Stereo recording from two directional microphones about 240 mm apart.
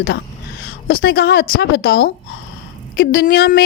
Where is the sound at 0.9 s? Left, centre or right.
Left.